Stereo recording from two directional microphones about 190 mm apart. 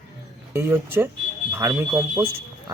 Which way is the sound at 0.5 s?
15° right (ahead or behind).